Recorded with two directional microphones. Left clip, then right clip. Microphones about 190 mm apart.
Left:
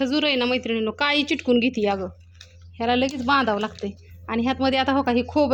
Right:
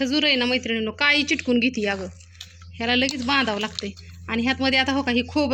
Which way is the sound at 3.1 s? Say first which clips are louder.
Left 2 dB; centre (ahead or behind).